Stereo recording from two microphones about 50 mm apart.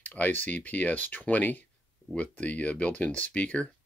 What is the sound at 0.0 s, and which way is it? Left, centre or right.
Speech, left.